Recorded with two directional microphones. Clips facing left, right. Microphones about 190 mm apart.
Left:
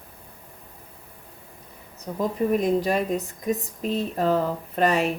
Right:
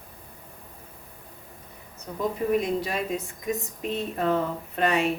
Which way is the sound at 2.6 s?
45° left (ahead or behind).